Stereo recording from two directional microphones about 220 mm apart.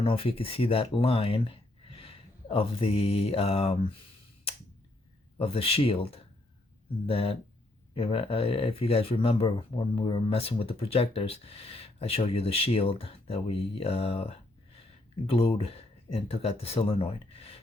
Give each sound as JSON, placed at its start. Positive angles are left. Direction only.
{"t": 0.0, "sound": "speech", "side_deg": 25}
{"t": 5.4, "sound": "speech", "side_deg": 25}